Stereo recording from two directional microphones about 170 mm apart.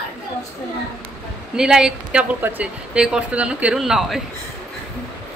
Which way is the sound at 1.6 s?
5° right (ahead or behind).